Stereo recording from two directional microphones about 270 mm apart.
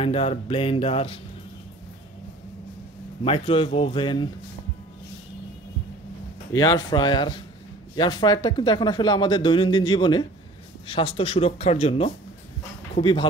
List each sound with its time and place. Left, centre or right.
0.0 s speech: centre
3.3 s speech: left
6.5 s speech: centre